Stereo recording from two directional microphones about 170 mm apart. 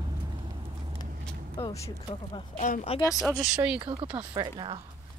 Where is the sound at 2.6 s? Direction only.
40° left (ahead or behind).